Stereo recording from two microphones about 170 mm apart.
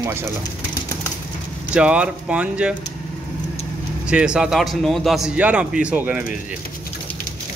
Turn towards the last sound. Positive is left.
turn(degrees=-10)  # may be behind; listen again after turning